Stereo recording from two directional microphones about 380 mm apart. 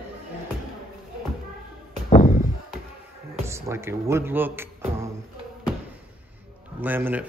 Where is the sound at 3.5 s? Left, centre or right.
Centre.